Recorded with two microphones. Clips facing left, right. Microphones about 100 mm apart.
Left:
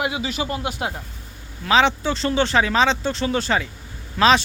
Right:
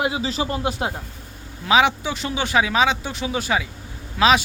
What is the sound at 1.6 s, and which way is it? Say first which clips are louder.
Speech: even; 15° right (ahead or behind).